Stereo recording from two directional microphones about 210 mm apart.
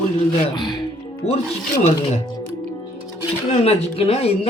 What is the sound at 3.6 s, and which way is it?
Speech, 30° left (ahead or behind).